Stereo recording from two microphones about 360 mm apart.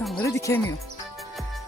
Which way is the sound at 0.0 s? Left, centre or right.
Centre.